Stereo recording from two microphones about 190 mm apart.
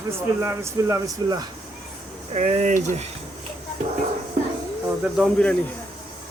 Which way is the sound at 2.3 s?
35° right (ahead or behind).